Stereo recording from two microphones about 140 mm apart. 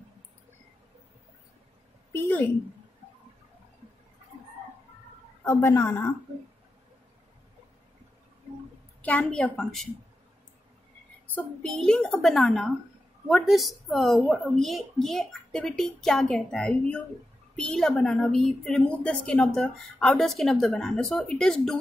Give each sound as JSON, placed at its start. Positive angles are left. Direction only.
{"t": 2.1, "sound": "a woman's voice", "side_deg": 15}
{"t": 5.4, "sound": "a woman's voice", "side_deg": 15}
{"t": 9.0, "sound": "a woman's voice", "side_deg": 10}
{"t": 11.3, "sound": "a woman's voice", "side_deg": 10}